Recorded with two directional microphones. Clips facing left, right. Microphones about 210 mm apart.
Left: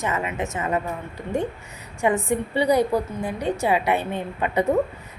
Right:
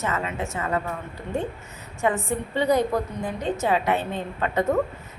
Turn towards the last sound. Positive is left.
turn(degrees=15)  # may be behind; listen again after turning